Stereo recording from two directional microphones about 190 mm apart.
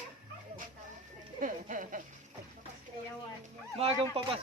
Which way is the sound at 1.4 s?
45° right (ahead or behind).